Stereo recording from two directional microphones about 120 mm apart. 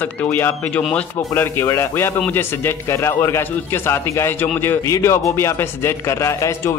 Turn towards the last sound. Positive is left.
turn(degrees=25)  # may be behind; listen again after turning